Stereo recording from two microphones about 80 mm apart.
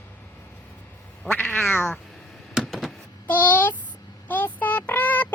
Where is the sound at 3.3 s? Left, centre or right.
Left.